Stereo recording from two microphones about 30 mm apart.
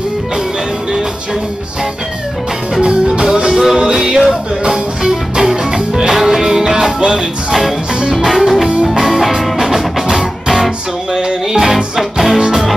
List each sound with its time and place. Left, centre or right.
2.8 s music: right
4.3 s music: right
8.0 s music: centre
8.3 s music: centre
11.1 s music: centre
11.6 s music: centre